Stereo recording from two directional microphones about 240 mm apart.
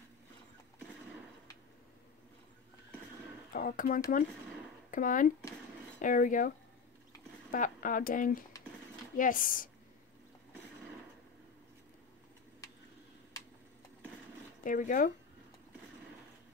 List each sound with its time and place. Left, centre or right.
3.5 s speech: left
7.5 s speech: left
14.6 s speech: left